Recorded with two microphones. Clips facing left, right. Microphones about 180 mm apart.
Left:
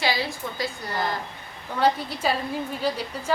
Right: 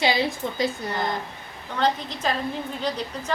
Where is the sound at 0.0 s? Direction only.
20° right (ahead or behind).